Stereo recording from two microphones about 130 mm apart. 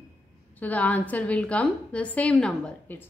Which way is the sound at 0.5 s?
10° left (ahead or behind).